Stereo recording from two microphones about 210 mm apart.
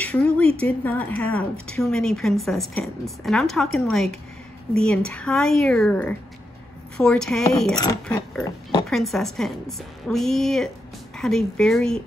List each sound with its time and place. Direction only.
0.0 s speech: 5° left (ahead or behind)
7.7 s speech: 15° left (ahead or behind)
8.8 s speech: centre (ahead or behind)